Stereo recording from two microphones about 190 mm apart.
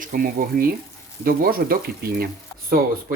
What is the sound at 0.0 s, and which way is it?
Speech, 50° right (ahead or behind).